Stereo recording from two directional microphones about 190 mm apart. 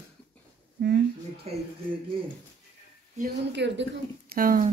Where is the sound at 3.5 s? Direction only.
70° right (ahead or behind).